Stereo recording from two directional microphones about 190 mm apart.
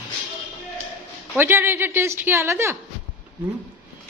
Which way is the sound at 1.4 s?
10° right (ahead or behind).